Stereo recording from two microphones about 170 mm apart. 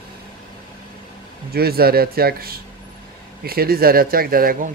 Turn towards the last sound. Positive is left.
turn(degrees=-60)  # may be behind; listen again after turning